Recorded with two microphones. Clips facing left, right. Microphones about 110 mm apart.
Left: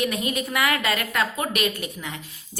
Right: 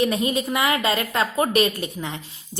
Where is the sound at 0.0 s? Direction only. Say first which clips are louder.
Right 4 dB; 30° right (ahead or behind).